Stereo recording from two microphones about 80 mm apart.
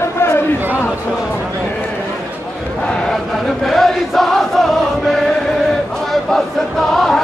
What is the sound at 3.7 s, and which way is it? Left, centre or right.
Chant, centre.